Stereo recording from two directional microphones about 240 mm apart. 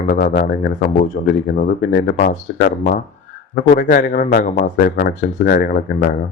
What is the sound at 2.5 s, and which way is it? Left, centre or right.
Speech, left.